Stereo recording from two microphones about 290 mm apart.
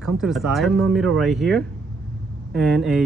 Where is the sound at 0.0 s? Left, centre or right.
Centre.